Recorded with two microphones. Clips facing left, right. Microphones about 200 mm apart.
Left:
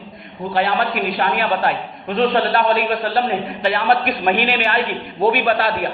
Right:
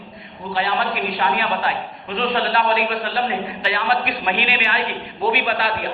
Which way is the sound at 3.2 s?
45° left (ahead or behind).